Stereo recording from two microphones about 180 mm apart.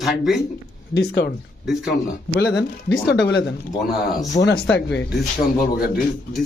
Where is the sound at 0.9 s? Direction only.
65° left (ahead or behind).